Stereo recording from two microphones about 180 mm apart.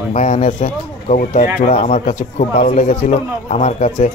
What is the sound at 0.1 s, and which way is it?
Speech, 40° left (ahead or behind).